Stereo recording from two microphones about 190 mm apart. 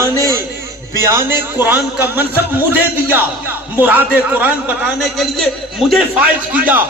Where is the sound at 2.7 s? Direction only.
10° right (ahead or behind).